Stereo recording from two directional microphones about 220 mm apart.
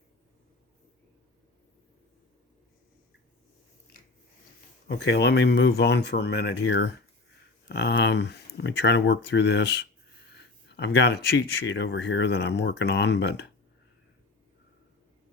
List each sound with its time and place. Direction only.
4.9 s speech: 50° left (ahead or behind)